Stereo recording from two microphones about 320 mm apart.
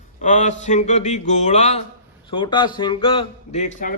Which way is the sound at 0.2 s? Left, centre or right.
Left.